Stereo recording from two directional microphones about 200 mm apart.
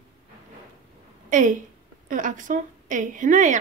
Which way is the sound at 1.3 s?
40° right (ahead or behind).